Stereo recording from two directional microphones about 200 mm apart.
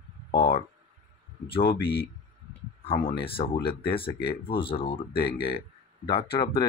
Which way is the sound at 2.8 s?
25° left (ahead or behind).